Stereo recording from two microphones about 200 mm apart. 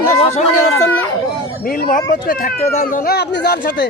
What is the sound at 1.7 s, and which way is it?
Speech, 45° left (ahead or behind).